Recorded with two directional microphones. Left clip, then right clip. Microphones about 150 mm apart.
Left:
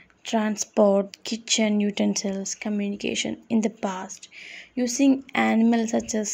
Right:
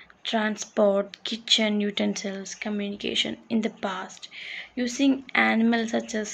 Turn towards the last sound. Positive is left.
turn(degrees=50)  # may be behind; listen again after turning